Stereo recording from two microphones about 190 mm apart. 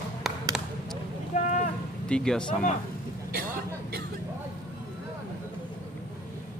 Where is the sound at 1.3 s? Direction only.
40° left (ahead or behind).